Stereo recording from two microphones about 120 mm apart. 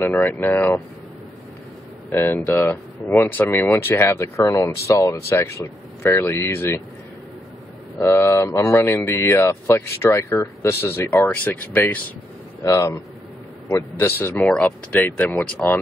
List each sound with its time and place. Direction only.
0.0 s speech: 15° left (ahead or behind)
2.0 s speech: 15° left (ahead or behind)
8.0 s speech: 25° left (ahead or behind)
12.6 s speech: 25° left (ahead or behind)